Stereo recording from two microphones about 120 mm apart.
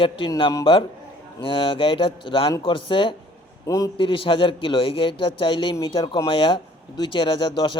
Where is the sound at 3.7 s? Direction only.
30° left (ahead or behind).